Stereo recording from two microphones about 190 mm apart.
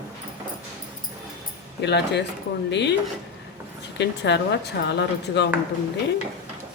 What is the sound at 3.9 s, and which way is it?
Speech, 65° left (ahead or behind).